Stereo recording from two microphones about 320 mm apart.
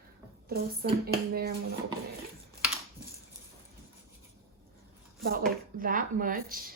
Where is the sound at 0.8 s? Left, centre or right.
Right.